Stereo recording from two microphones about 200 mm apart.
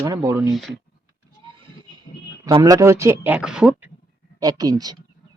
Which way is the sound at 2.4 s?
15° right (ahead or behind).